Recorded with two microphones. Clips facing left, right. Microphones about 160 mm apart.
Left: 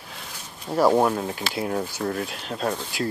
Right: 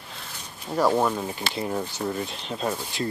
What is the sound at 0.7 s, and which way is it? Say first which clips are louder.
Speech: left 3 dB; 10° left (ahead or behind).